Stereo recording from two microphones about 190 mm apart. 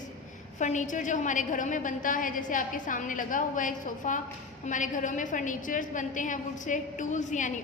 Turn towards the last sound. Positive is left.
turn(degrees=40)  # may be behind; listen again after turning